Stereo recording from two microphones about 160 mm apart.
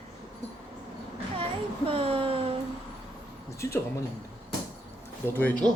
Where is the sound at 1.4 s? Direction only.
35° right (ahead or behind).